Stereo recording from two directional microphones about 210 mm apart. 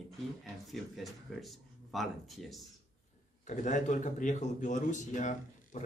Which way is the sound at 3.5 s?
35° left (ahead or behind).